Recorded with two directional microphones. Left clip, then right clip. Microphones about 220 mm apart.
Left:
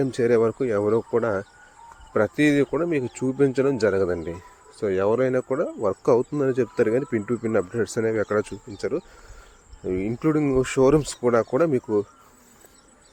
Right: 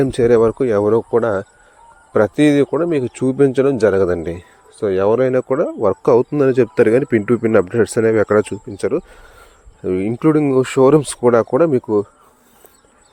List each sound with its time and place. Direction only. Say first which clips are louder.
0.0 s a man's voice: right 7 dB; 35° right (ahead or behind)